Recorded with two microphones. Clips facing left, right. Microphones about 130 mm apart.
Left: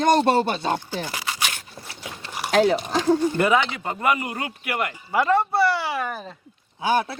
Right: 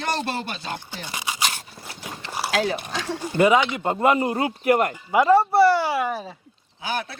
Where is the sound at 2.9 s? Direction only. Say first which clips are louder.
Left 9 dB; 35° left (ahead or behind).